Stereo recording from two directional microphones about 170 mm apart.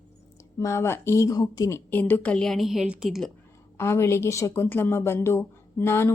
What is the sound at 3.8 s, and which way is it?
Speech, 15° left (ahead or behind).